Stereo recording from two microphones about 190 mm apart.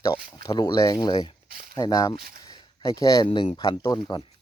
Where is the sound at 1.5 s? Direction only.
50° right (ahead or behind).